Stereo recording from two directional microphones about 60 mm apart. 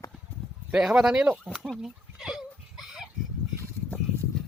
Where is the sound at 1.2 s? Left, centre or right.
Right.